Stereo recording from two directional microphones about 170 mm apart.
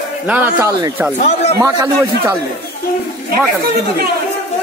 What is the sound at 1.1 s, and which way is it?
Speech, 40° left (ahead or behind).